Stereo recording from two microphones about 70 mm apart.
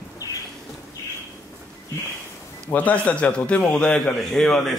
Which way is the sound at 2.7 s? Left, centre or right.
Left.